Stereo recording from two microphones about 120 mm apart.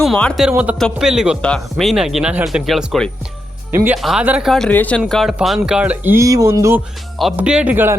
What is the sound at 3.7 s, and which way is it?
Speech, 20° right (ahead or behind).